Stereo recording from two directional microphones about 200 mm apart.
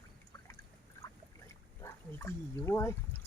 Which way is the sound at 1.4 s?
15° left (ahead or behind).